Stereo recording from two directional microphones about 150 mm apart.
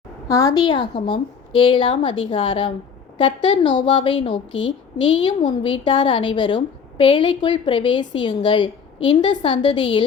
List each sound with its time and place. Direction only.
0.3 s a woman's voice: 25° left (ahead or behind)